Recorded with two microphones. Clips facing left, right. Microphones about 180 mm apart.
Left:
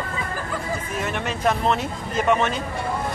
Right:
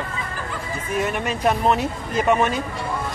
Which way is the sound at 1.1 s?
10° right (ahead or behind).